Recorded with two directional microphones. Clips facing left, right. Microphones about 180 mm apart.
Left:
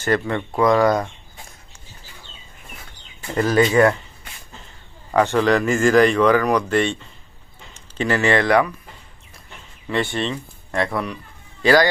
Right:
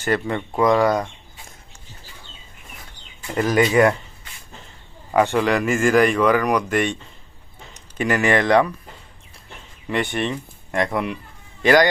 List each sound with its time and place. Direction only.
0.3 s speech: 15° right (ahead or behind)
3.3 s speech: 15° right (ahead or behind)
5.1 s speech: 10° right (ahead or behind)
9.9 s speech: 15° right (ahead or behind)